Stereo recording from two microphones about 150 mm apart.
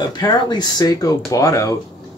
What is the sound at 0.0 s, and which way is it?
Speech, 30° left (ahead or behind).